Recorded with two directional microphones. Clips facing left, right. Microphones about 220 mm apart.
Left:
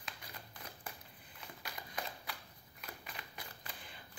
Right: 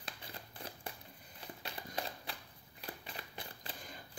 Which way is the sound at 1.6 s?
30° right (ahead or behind).